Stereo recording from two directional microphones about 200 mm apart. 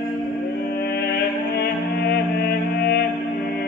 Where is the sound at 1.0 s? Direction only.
50° left (ahead or behind).